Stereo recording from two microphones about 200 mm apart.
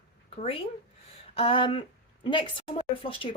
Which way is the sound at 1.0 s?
25° left (ahead or behind).